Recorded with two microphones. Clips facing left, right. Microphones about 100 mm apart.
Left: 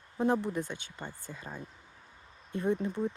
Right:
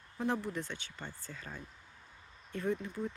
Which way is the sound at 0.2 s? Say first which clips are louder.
Left 6 dB; 20° left (ahead or behind).